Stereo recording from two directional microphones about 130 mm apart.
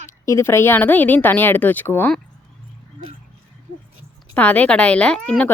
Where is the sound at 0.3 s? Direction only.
20° left (ahead or behind).